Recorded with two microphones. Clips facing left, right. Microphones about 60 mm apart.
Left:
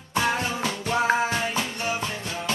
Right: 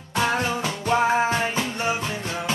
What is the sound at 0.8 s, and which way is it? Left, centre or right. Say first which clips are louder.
Music: right 3 dB; right.